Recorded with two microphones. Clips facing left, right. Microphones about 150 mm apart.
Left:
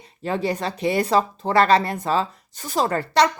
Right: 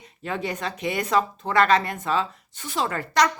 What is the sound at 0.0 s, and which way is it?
Speech, 35° left (ahead or behind).